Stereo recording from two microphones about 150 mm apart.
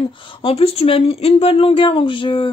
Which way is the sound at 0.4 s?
40° left (ahead or behind).